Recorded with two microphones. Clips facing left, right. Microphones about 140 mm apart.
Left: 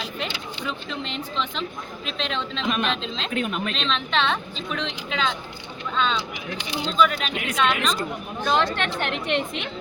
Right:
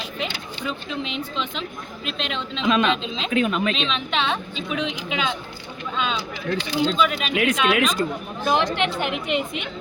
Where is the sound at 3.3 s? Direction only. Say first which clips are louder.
Right 6 dB; 90° right.